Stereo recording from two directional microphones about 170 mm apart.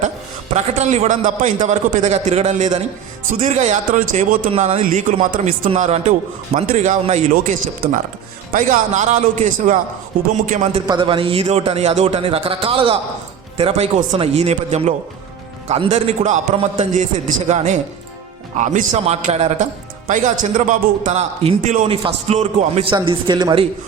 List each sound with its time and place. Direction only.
0.5 s a man's voice: 40° right (ahead or behind)
10.8 s a man's voice: 25° right (ahead or behind); by 16.4 s 45° right (ahead or behind)
17.5 s a man's voice: 40° right (ahead or behind); by 23.6 s 25° right (ahead or behind)